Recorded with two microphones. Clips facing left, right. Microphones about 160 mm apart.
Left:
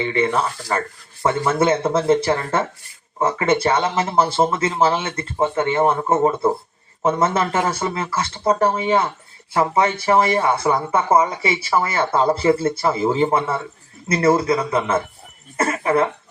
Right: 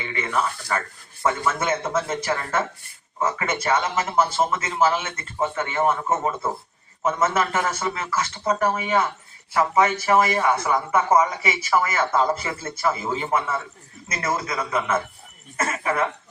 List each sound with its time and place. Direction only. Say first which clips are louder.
0.0 s speech: left 6 dB; 30° left (ahead or behind)